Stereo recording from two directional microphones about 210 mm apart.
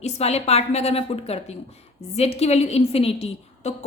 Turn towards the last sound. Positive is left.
turn(degrees=30)  # may be behind; listen again after turning